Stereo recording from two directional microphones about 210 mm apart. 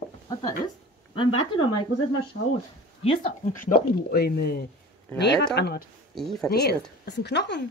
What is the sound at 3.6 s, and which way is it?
Speech, 45° left (ahead or behind).